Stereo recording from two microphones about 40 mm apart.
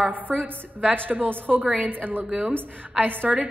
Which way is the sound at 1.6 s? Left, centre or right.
Right.